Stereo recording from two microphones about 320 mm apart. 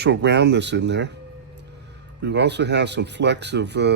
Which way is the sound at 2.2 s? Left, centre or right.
Right.